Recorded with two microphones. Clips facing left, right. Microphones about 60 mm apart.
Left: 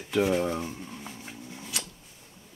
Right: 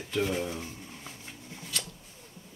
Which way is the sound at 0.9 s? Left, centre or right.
Centre.